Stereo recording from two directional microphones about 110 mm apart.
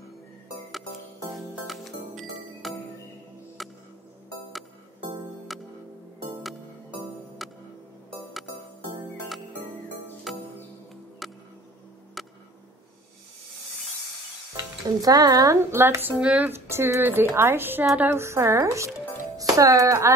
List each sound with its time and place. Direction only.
1.7 s music: centre (ahead or behind)
5.5 s music: centre (ahead or behind)
7.4 s music: centre (ahead or behind)
10.3 s music: centre (ahead or behind)
12.2 s a sound: centre (ahead or behind)
15.0 s speech: 35° right (ahead or behind)
15.6 s a woman's voice: 20° right (ahead or behind)